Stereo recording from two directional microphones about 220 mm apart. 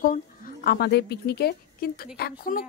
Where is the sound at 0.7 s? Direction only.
45° left (ahead or behind).